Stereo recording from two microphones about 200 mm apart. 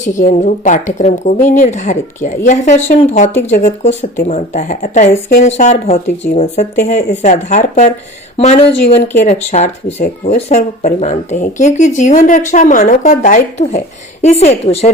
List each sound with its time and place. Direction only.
0.0 s speech: 40° left (ahead or behind)